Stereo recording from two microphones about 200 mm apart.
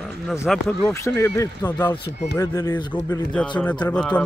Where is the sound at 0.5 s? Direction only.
10° left (ahead or behind).